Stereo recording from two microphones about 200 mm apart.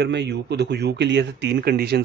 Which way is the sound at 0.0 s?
60° right (ahead or behind).